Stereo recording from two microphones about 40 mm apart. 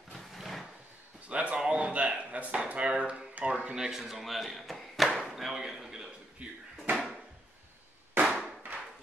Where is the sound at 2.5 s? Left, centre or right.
Right.